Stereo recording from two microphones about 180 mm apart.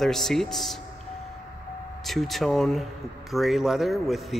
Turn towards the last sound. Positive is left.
turn(degrees=0)  # may be behind; listen again after turning